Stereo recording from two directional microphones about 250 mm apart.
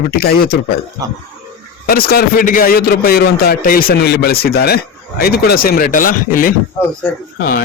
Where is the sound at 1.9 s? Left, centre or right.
Left.